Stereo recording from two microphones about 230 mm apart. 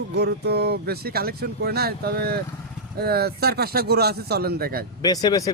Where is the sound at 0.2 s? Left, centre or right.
Right.